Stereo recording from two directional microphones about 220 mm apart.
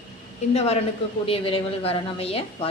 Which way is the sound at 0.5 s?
30° left (ahead or behind).